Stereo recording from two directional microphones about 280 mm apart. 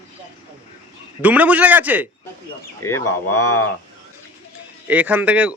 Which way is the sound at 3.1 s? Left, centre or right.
Left.